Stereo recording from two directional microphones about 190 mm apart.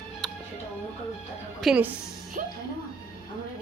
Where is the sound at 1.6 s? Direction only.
5° right (ahead or behind).